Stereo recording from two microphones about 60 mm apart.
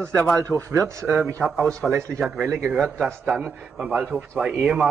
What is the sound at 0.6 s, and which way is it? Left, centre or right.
Speech, right.